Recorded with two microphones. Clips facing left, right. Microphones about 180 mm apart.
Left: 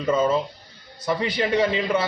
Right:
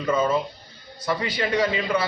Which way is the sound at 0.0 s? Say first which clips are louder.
Left 1 dB; 25° left (ahead or behind).